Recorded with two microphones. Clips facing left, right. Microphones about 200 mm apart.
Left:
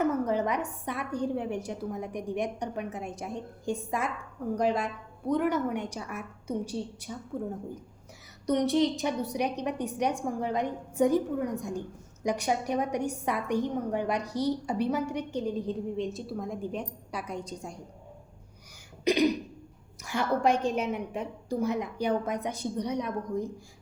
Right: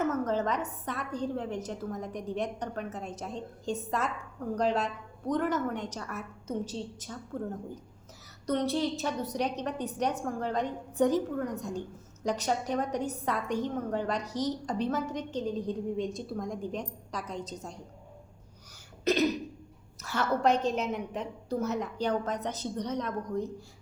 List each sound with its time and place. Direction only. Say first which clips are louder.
0.0 s a woman's voice: left 2 dB; 15° left (ahead or behind)
19.0 s cough: left 2 dB; 15° left (ahead or behind)
20.0 s a woman's voice: left 1 dB; 15° left (ahead or behind)